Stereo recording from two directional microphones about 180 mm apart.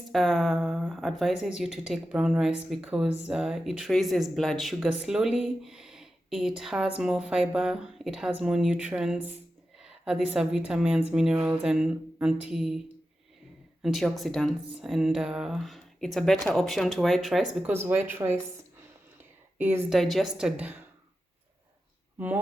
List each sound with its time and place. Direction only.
0.1 s a woman's voice: centre (ahead or behind)
13.8 s speech: centre (ahead or behind)
19.9 s speech: centre (ahead or behind)